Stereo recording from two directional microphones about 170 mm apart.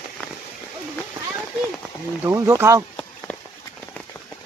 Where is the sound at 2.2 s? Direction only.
15° right (ahead or behind).